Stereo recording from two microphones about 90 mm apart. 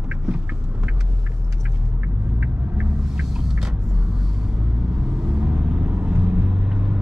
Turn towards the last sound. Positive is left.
turn(degrees=-10)  # may be behind; listen again after turning